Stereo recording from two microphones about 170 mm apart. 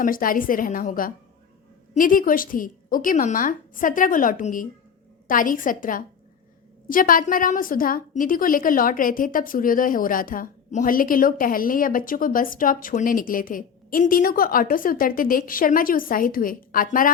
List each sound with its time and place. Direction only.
0.0 s a woman's voice: 55° left (ahead or behind)